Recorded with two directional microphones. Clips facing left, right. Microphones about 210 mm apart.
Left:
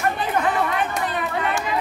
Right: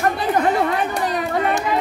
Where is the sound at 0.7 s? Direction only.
40° right (ahead or behind).